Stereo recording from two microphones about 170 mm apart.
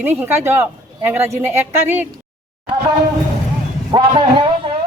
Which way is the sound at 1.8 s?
10° right (ahead or behind).